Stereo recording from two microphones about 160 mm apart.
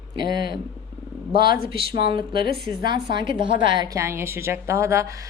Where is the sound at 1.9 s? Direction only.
80° left.